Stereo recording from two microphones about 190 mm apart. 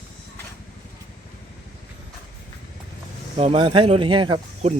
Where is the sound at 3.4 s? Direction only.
30° right (ahead or behind).